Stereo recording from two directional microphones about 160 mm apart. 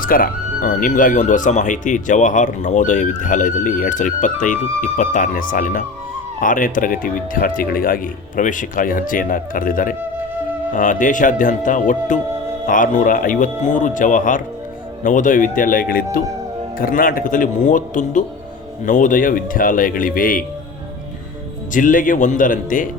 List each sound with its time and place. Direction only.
0.0 s speech: 60° left (ahead or behind)
21.7 s speech: 55° left (ahead or behind)